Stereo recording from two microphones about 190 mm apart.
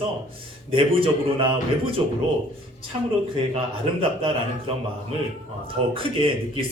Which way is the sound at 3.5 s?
30° right (ahead or behind).